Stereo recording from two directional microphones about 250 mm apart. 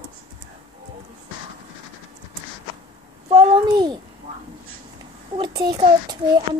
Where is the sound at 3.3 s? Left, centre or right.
Centre.